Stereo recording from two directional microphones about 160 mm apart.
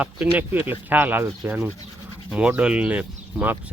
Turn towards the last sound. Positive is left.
turn(degrees=-10)  # may be behind; listen again after turning